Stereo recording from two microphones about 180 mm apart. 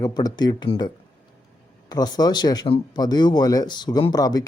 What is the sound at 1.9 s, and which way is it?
Speech, 20° left (ahead or behind).